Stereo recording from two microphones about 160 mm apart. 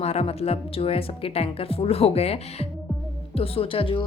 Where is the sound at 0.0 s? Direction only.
40° left (ahead or behind).